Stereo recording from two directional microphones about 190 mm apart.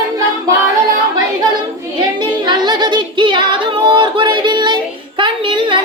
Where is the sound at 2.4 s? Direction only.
25° right (ahead or behind).